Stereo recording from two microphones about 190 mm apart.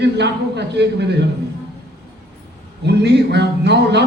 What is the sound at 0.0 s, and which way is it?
A man's voice, 65° right (ahead or behind).